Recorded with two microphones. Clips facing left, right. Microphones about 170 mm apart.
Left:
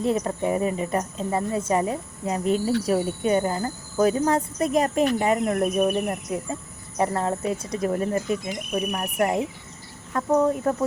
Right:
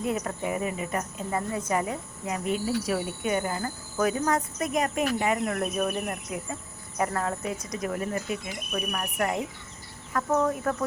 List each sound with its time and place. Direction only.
0.0 s a woman's voice: 30° left (ahead or behind)
8.4 s speech: 25° left (ahead or behind)